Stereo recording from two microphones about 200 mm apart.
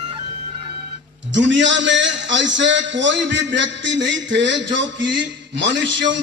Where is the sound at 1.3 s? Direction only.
65° right (ahead or behind).